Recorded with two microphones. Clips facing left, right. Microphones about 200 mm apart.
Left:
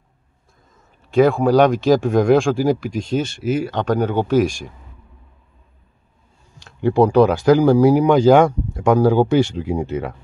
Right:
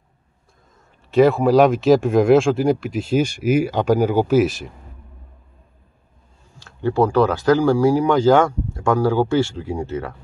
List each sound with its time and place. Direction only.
1.1 s speech: centre (ahead or behind)
6.6 s speech: 15° left (ahead or behind)